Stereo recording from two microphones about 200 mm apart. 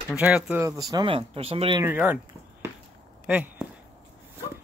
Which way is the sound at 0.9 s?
25° right (ahead or behind).